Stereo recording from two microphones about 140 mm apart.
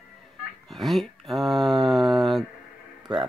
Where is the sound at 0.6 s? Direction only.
Centre (ahead or behind).